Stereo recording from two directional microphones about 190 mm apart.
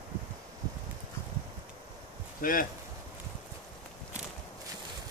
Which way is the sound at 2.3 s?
50° left (ahead or behind).